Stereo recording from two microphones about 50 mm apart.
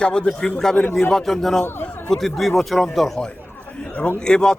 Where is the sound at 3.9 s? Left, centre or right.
Left.